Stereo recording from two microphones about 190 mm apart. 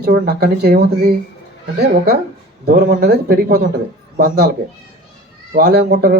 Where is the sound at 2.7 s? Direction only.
50° right (ahead or behind).